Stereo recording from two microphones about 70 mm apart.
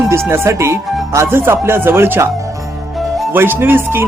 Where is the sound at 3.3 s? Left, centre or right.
Right.